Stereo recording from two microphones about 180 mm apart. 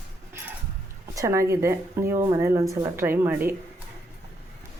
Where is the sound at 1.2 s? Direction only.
15° right (ahead or behind).